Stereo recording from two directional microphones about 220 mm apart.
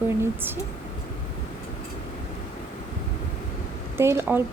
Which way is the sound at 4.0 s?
10° right (ahead or behind).